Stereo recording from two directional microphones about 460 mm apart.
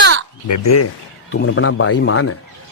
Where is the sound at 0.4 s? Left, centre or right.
Left.